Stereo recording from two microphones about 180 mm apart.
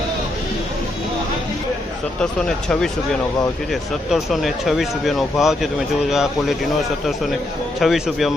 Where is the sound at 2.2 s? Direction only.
5° left (ahead or behind).